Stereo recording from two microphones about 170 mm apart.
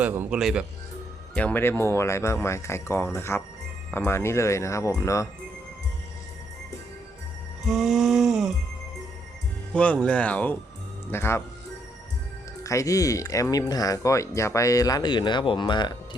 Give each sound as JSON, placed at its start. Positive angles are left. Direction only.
{"t": 0.0, "sound": "speech", "side_deg": -10}
{"t": 7.7, "sound": "music", "side_deg": 0}
{"t": 9.7, "sound": "speech", "side_deg": 5}
{"t": 12.6, "sound": "speech", "side_deg": 20}